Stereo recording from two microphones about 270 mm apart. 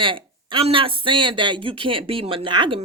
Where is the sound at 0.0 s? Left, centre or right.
Centre.